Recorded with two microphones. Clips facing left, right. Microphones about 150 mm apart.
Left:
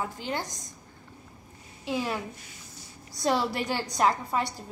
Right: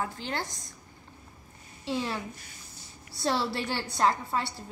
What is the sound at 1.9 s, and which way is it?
Speech, 5° left (ahead or behind).